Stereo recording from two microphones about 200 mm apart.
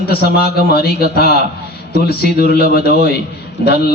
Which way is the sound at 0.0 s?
50° left (ahead or behind).